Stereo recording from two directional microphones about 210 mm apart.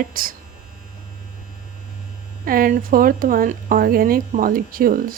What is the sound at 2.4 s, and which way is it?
Speech, 45° right (ahead or behind).